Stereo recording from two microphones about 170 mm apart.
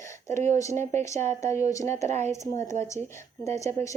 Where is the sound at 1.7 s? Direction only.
20° left (ahead or behind).